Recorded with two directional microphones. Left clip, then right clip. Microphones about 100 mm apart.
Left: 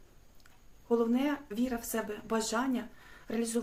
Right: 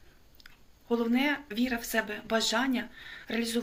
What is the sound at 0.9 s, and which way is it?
Speech, 35° left (ahead or behind).